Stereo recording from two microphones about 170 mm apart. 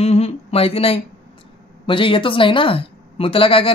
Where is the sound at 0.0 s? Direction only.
40° left (ahead or behind).